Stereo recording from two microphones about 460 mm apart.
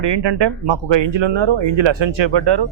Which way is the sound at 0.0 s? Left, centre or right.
Right.